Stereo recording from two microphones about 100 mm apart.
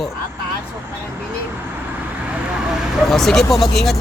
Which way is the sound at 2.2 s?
10° right (ahead or behind).